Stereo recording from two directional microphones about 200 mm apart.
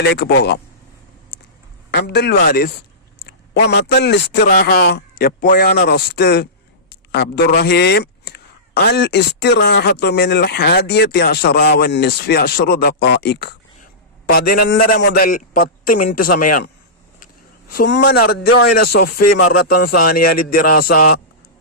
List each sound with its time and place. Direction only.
0.0 s speech: 55° left (ahead or behind)
1.9 s a man's voice: 55° left (ahead or behind)
6.9 s a sound: 60° left (ahead or behind)
7.4 s a man's voice: 50° left (ahead or behind)
17.7 s a man's voice: 55° left (ahead or behind)